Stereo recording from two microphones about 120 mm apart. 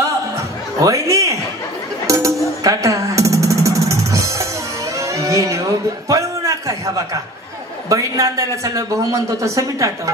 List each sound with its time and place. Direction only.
0.7 s a sound: 25° right (ahead or behind)
2.0 s music: 25° right (ahead or behind)
7.9 s a man's voice: 30° right (ahead or behind)